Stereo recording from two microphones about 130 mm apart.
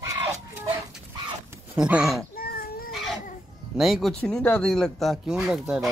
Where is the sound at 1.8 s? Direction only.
5° right (ahead or behind).